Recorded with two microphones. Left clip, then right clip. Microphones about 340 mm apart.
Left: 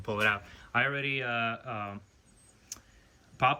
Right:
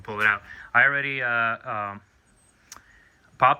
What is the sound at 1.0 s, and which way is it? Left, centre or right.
Speech, centre.